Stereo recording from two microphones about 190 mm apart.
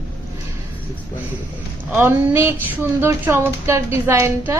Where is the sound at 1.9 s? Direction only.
10° right (ahead or behind).